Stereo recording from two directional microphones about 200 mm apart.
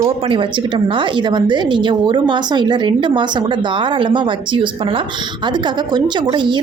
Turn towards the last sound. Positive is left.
turn(degrees=-25)  # may be behind; listen again after turning